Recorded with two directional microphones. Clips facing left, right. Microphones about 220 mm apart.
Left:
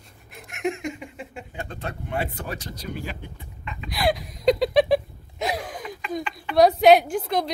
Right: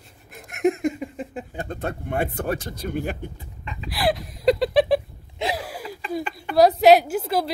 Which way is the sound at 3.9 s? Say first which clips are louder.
Right 1 dB; centre (ahead or behind).